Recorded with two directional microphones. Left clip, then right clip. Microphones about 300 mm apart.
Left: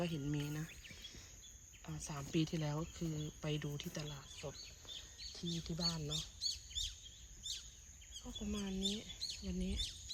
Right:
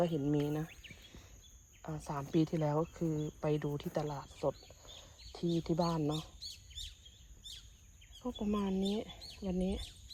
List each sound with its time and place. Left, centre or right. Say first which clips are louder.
0.0 s speech: right 9 dB; centre
1.8 s speech: right 8 dB; centre
6.5 s chirp: left 5 dB; left
8.4 s speech: right 5 dB; centre